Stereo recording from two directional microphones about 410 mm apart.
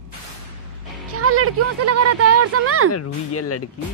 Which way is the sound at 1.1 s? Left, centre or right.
Right.